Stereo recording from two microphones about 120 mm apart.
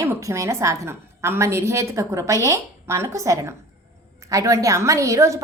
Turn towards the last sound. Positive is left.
turn(degrees=-25)  # may be behind; listen again after turning